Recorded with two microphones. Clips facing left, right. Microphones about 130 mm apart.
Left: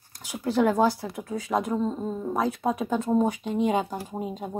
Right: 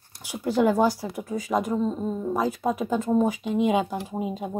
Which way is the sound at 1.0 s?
Centre (ahead or behind).